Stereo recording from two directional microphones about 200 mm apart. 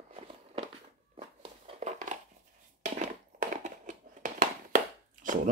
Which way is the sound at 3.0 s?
40° right (ahead or behind).